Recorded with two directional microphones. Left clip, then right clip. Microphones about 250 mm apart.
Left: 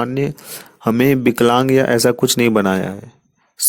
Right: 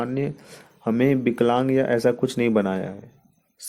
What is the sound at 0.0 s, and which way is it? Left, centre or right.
Speech, left.